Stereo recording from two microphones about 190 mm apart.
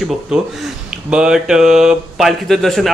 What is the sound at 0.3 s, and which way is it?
Speech, 5° right (ahead or behind).